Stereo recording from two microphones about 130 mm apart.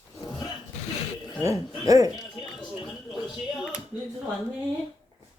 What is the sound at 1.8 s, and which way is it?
Speech, 25° right (ahead or behind).